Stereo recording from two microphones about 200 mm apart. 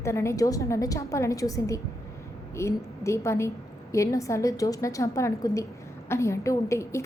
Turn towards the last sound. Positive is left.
turn(degrees=15)  # may be behind; listen again after turning